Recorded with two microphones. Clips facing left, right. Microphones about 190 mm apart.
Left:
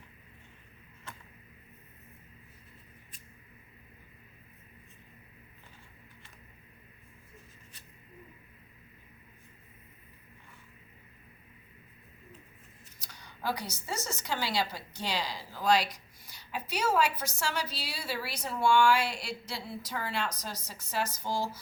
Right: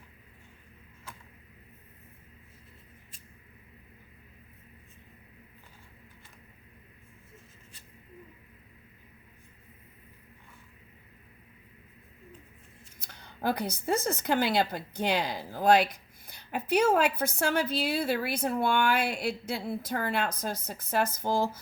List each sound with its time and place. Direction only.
13.0 s speech: 55° right (ahead or behind)